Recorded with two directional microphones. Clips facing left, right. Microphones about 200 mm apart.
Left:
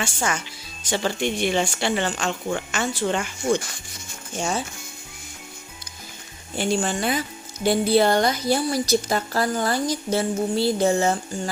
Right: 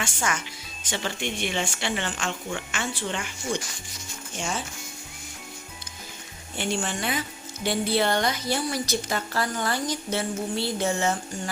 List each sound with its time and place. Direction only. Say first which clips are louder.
0.0 s a woman's voice: left 3 dB; 30° left (ahead or behind); by 4.0 s 50° left (ahead or behind)
6.6 s a woman's voice: left 5 dB; 40° left (ahead or behind)